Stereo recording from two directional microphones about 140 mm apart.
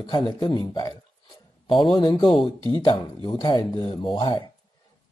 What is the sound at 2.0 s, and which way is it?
Speech, 35° left (ahead or behind).